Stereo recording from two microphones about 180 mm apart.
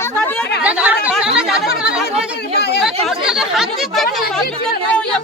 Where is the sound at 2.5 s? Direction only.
65° left (ahead or behind).